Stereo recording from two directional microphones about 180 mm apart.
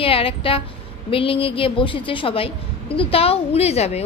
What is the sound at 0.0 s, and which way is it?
A woman's voice, 30° left (ahead or behind).